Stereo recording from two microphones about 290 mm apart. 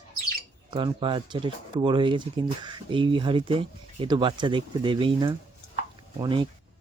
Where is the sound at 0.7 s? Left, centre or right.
Centre.